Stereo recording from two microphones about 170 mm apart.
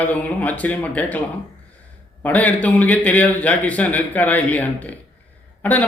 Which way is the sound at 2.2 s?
10° left (ahead or behind).